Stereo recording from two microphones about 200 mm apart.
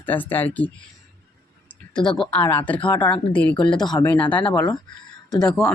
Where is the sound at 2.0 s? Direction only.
5° left (ahead or behind).